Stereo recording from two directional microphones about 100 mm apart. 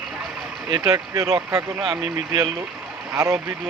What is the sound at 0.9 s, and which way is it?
Speech, 30° right (ahead or behind).